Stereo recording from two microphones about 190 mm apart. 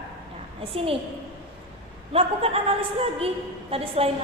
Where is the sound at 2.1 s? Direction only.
30° right (ahead or behind).